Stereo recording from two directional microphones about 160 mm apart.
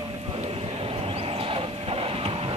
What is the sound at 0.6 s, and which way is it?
Vehicle, 35° right (ahead or behind).